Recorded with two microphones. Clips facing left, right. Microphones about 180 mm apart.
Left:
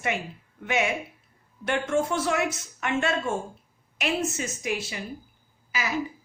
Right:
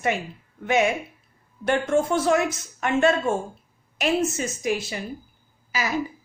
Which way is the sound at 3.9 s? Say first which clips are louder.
Right 5 dB; 40° right (ahead or behind).